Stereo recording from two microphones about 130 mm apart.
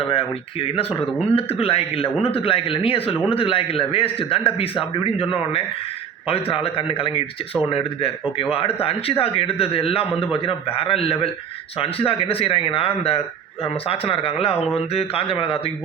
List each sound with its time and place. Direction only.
0.0 s speech: 45° left (ahead or behind)